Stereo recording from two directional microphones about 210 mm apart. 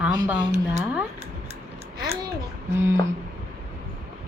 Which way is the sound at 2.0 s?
20° right (ahead or behind).